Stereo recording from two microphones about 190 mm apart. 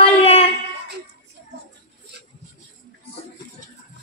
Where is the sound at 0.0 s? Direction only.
30° left (ahead or behind).